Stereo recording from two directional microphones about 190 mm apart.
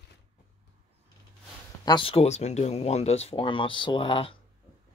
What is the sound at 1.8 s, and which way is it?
Speech, 25° left (ahead or behind).